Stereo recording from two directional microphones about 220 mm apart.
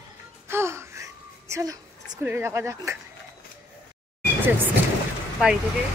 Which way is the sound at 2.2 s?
10° right (ahead or behind).